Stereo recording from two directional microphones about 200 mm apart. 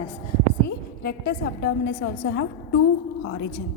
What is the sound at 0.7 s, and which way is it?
A woman's voice, 50° left (ahead or behind).